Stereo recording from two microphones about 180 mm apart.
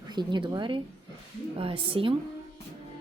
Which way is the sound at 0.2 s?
25° right (ahead or behind).